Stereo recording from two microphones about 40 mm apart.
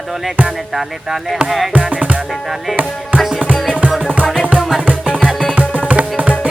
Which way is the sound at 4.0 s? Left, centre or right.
Right.